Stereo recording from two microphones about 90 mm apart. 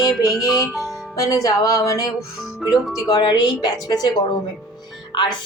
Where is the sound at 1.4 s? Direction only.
45° left (ahead or behind).